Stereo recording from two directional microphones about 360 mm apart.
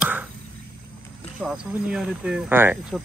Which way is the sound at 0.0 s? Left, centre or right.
Centre.